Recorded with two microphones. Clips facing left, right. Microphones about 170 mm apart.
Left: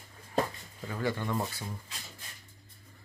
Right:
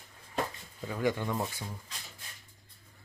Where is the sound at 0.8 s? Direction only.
15° right (ahead or behind).